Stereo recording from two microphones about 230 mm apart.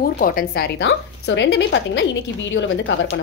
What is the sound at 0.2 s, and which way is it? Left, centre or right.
A woman's voice, left.